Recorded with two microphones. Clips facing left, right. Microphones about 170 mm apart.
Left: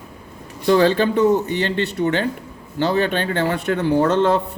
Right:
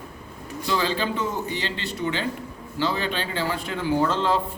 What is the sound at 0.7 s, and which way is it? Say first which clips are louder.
Speech: left 10 dB; 55° left (ahead or behind).